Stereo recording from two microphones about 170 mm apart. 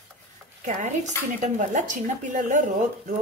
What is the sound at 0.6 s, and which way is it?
Speech, 45° right (ahead or behind).